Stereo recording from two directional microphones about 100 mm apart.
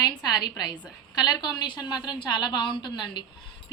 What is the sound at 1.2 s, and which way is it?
A woman's voice, 40° left (ahead or behind).